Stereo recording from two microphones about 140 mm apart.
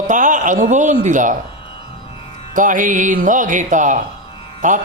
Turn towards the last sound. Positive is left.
turn(degrees=-60)  # may be behind; listen again after turning